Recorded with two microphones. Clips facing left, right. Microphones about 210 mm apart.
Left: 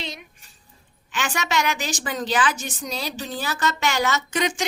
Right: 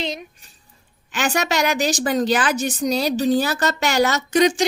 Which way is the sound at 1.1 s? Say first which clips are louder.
Right 4 dB; 40° right (ahead or behind).